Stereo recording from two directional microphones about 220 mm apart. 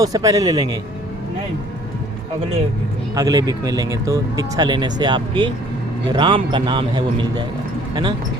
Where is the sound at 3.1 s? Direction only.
15° right (ahead or behind).